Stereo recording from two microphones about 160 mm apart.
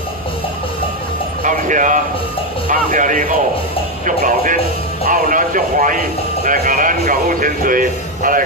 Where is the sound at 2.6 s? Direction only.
55° right (ahead or behind).